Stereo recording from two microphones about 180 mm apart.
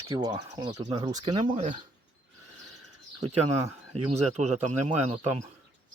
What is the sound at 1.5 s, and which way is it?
Speech, 45° right (ahead or behind).